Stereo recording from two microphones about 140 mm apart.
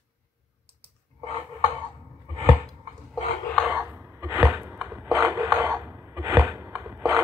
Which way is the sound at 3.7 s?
15° right (ahead or behind).